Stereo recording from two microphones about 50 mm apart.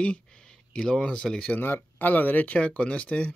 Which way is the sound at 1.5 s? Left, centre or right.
Left.